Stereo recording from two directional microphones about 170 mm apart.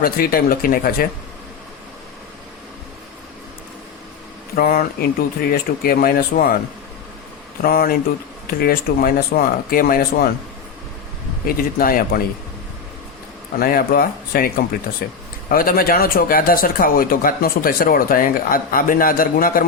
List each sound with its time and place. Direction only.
0.0 s speech: 60° left (ahead or behind)
4.5 s speech: 60° left (ahead or behind)
7.6 s speech: 60° left (ahead or behind)
11.4 s speech: 60° left (ahead or behind)
13.6 s speech: 60° left (ahead or behind)